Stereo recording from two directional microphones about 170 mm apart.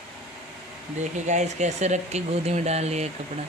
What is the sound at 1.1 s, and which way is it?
Speech, 45° right (ahead or behind).